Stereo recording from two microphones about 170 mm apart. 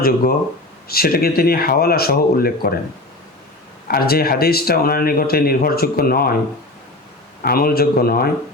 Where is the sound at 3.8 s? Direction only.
60° left (ahead or behind).